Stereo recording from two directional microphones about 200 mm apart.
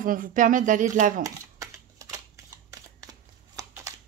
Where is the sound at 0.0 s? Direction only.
40° right (ahead or behind).